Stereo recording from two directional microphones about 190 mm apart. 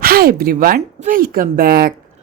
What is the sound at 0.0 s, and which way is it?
A woman's voice, 55° right (ahead or behind).